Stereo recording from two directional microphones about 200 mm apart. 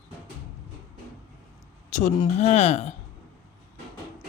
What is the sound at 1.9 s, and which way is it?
Speech, 35° left (ahead or behind).